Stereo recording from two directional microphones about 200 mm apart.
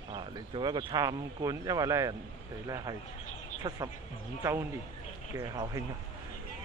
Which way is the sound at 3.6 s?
25° right (ahead or behind).